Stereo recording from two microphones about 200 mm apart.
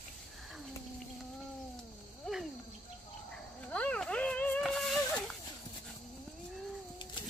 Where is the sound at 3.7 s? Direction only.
5° left (ahead or behind).